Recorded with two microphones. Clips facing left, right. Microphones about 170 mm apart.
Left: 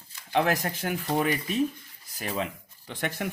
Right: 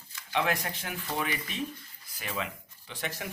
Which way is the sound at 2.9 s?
55° left (ahead or behind).